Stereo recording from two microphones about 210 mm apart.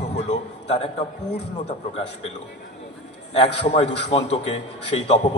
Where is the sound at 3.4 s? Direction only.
30° left (ahead or behind).